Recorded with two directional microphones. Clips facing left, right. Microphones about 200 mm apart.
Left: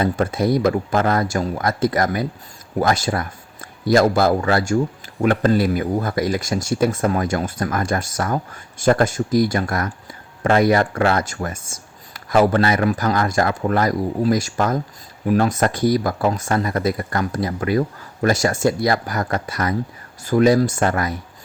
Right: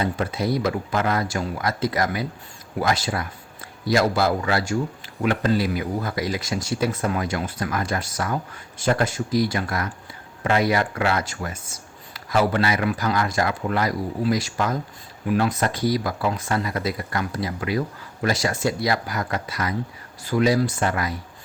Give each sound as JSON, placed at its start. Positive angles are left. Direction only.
{"t": 0.0, "sound": "speech", "side_deg": 45}